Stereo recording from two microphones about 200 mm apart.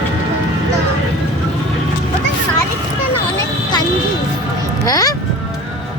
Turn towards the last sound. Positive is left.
turn(degrees=15)  # may be behind; listen again after turning